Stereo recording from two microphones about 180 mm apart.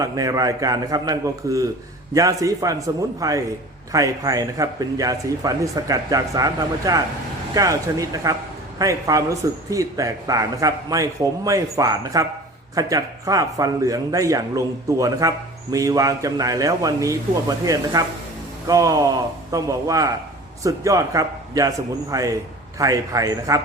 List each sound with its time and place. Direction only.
0.0 s speech: 20° right (ahead or behind)